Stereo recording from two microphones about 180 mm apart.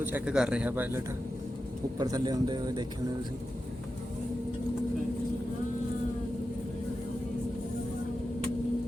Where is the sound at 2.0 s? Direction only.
20° right (ahead or behind).